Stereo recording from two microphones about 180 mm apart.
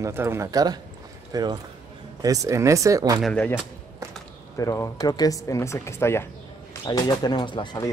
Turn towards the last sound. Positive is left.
turn(degrees=25)  # may be behind; listen again after turning